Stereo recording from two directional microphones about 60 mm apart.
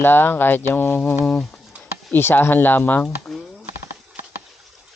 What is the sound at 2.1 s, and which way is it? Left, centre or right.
Speech, left.